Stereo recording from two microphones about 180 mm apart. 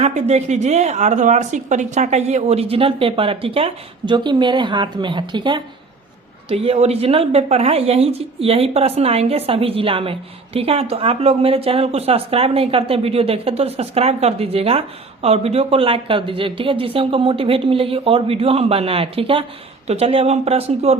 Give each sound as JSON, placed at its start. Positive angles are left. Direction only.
{"t": 0.0, "sound": "a woman's voice", "side_deg": -40}